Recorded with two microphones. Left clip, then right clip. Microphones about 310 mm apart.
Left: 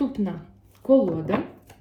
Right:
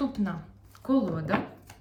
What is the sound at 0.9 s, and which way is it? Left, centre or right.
Speech, centre.